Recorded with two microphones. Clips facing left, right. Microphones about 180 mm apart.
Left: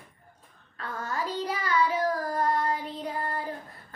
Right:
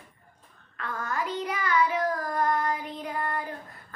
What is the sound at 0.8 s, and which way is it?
Child singing, 30° left (ahead or behind).